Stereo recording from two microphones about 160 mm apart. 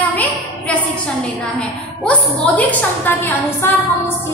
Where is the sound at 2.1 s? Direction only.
10° left (ahead or behind).